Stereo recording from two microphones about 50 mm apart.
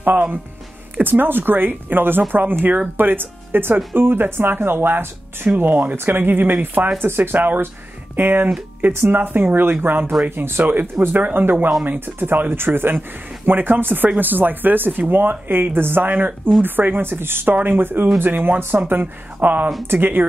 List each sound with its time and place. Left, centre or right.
0.9 s speech: right
10.6 s speech: right
11.0 s speech: right